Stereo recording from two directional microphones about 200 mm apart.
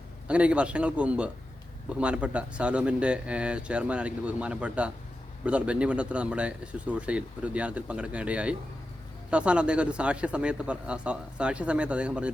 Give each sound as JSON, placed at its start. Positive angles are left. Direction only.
{"t": 0.3, "sound": "speech", "side_deg": -5}